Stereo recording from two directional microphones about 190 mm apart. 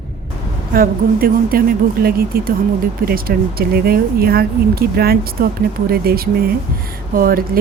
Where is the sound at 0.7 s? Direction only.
50° right (ahead or behind).